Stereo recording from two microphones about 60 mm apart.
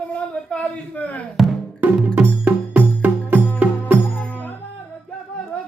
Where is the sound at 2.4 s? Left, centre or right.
Right.